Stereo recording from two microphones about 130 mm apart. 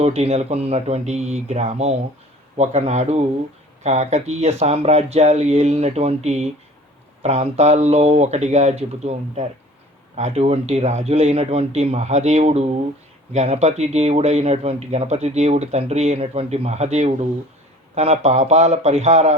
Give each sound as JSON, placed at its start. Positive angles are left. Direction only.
{"t": 0.0, "sound": "speech", "side_deg": -55}